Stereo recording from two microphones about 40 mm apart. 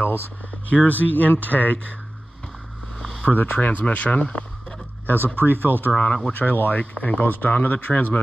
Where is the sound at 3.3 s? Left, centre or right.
Left.